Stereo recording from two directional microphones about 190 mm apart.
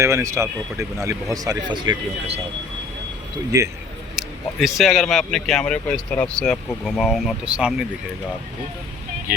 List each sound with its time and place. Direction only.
0.0 s speech: 15° right (ahead or behind)
3.5 s speech: 20° right (ahead or behind)
4.1 s speech: centre (ahead or behind)